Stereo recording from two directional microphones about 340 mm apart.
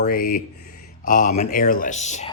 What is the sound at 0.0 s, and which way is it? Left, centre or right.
Speech, left.